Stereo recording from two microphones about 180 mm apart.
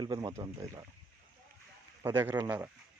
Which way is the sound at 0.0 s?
20° right (ahead or behind).